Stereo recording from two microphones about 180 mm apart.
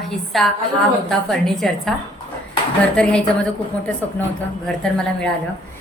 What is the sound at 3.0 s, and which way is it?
Speech, 5° left (ahead or behind).